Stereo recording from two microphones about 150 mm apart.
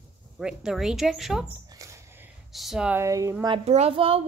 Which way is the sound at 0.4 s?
5° right (ahead or behind).